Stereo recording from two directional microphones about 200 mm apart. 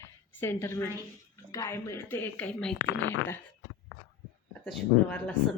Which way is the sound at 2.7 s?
70° left (ahead or behind).